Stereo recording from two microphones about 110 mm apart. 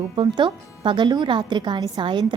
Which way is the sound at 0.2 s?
50° right (ahead or behind).